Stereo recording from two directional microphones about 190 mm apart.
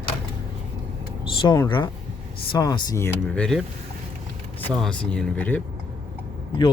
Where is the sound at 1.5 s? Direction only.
25° left (ahead or behind); by 3.6 s 5° left (ahead or behind).